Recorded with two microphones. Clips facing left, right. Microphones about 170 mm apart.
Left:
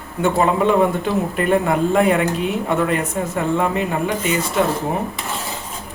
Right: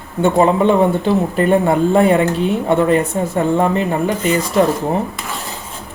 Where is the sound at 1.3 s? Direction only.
30° right (ahead or behind).